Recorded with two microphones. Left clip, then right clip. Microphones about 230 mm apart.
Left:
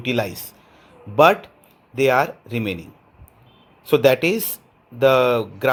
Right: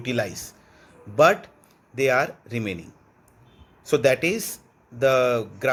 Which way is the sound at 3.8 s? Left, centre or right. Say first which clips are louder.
Left 4 dB; centre.